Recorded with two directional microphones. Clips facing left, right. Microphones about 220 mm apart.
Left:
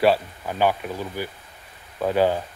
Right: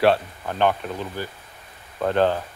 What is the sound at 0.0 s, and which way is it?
Speech, 5° left (ahead or behind).